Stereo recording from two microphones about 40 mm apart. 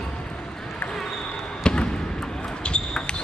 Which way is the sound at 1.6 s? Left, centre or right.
Left.